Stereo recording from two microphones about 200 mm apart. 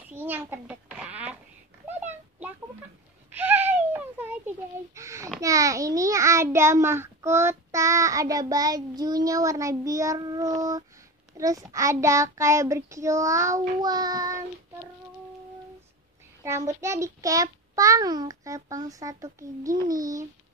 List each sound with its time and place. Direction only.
0.1 s a sound: 10° right (ahead or behind)
5.4 s a child's voice: 15° right (ahead or behind)
11.3 s child singing: 15° right (ahead or behind)
16.8 s child singing: 15° right (ahead or behind)